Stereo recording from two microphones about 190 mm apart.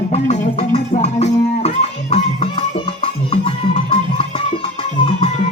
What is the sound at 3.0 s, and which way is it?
Music, 30° left (ahead or behind).